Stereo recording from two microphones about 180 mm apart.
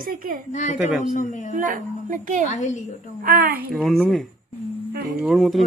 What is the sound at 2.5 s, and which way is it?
Speech, 40° left (ahead or behind).